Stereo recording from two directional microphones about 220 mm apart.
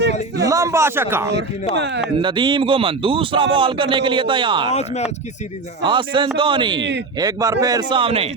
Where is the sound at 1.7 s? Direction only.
50° right (ahead or behind).